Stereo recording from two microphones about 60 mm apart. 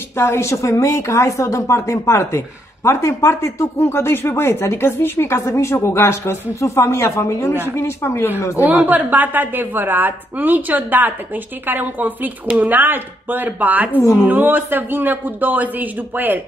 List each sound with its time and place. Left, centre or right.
0.2 s a woman's voice: left
5.4 s a woman's voice: left
8.8 s a woman's voice: right